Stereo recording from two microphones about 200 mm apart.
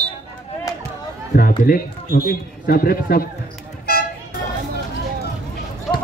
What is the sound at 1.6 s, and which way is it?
A man's voice, 50° left (ahead or behind).